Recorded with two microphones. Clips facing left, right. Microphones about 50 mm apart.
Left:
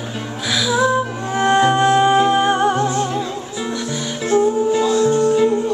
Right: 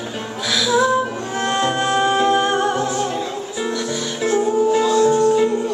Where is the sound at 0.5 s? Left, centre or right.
Centre.